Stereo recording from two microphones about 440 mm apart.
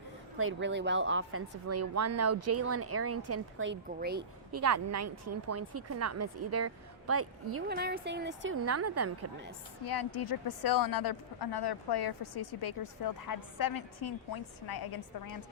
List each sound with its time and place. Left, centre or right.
0.3 s speech: right
4.5 s speech: right
9.9 s speech: left